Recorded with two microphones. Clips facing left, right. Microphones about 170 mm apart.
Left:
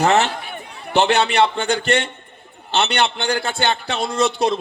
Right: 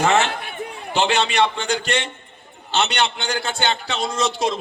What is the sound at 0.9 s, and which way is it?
A man's voice, 60° left (ahead or behind).